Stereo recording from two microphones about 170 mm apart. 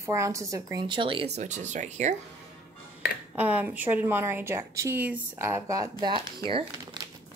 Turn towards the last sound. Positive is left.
turn(degrees=-30)  # may be behind; listen again after turning